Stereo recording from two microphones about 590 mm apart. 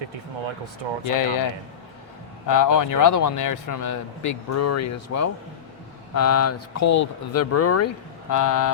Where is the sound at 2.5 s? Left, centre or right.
Left.